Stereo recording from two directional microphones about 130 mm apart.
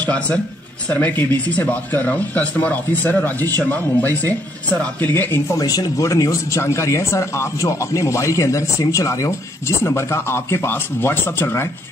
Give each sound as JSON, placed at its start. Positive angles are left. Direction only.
{"t": 0.0, "sound": "speech", "side_deg": 10}